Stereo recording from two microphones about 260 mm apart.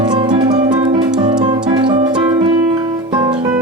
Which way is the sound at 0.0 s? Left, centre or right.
Centre.